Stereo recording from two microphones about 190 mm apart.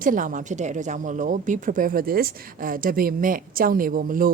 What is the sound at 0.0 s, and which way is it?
A woman's voice, 45° right (ahead or behind).